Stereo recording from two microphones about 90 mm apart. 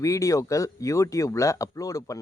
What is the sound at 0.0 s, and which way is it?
Speech, 35° left (ahead or behind).